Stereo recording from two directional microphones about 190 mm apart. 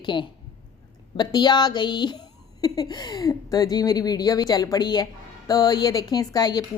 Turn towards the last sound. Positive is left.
turn(degrees=20)  # may be behind; listen again after turning